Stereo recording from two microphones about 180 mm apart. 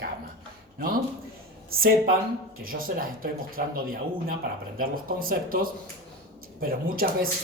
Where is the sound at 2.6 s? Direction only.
50° right (ahead or behind).